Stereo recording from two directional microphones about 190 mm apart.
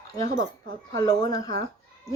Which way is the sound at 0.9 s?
20° left (ahead or behind).